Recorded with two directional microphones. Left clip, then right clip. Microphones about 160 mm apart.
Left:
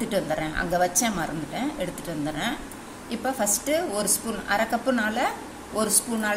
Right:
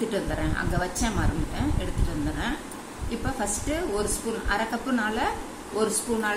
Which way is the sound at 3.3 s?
60° left (ahead or behind).